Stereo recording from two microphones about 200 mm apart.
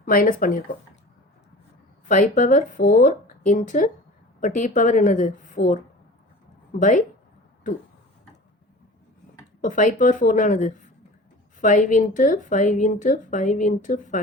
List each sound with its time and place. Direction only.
0.0 s speech: 45° left (ahead or behind)
2.0 s speech: 40° left (ahead or behind)
9.6 s speech: 40° left (ahead or behind)